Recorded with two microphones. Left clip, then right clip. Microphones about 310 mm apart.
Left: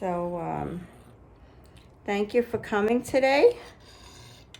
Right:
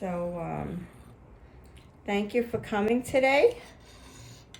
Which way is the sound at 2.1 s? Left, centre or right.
Centre.